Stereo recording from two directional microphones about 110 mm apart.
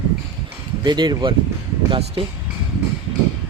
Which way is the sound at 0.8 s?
40° right (ahead or behind).